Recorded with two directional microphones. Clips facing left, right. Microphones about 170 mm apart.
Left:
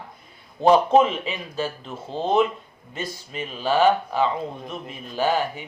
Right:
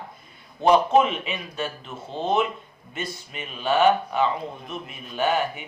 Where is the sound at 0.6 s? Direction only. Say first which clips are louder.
Left 2 dB; 35° left (ahead or behind).